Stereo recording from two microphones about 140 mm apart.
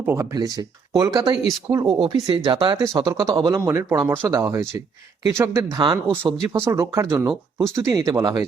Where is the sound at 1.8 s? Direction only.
40° right (ahead or behind).